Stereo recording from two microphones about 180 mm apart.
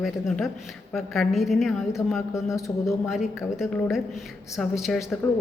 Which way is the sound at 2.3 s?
15° left (ahead or behind).